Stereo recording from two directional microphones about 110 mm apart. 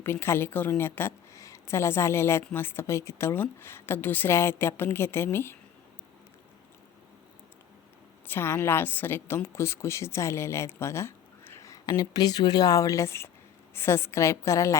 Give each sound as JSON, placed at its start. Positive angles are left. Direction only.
{"t": 0.0, "sound": "a woman's voice", "side_deg": 20}
{"t": 8.3, "sound": "a woman's voice", "side_deg": 20}